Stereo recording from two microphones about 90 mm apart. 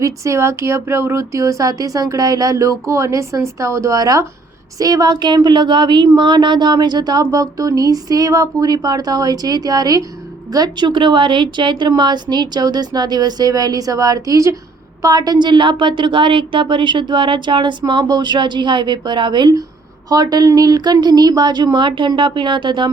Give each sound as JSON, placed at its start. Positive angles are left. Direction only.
{"t": 0.0, "sound": "a woman's voice", "side_deg": -35}